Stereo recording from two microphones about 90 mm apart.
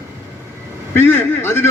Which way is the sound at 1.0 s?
25° left (ahead or behind).